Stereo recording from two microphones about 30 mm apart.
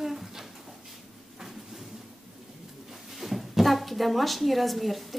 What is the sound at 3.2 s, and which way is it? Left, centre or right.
A woman's voice, centre.